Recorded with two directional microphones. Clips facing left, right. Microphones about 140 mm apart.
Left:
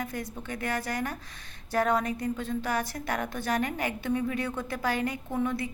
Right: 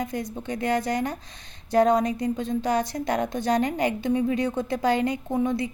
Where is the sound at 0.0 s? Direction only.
20° right (ahead or behind).